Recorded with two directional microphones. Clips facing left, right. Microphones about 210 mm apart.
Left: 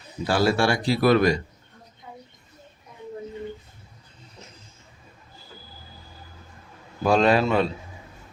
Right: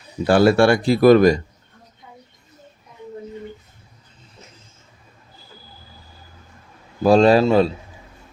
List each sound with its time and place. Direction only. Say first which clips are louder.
0.3 s speech: right 8 dB; 60° right (ahead or behind)
7.0 s a man's voice: right 6 dB; 35° right (ahead or behind)